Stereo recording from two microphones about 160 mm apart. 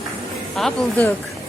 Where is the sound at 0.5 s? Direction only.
Centre (ahead or behind).